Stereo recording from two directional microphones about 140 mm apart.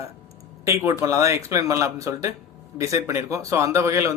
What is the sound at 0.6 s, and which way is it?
Speech, 20° right (ahead or behind).